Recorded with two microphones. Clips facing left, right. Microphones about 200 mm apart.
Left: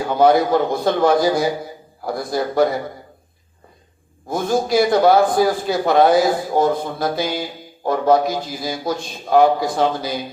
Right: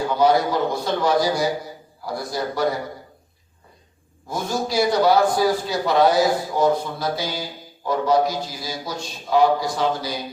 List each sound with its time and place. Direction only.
0.2 s a man's voice: 55° left (ahead or behind)
4.3 s a man's voice: 55° left (ahead or behind)